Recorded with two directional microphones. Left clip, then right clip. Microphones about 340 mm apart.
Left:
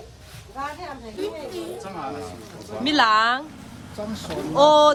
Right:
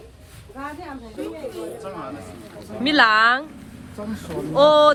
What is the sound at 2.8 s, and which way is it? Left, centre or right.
Speech, centre.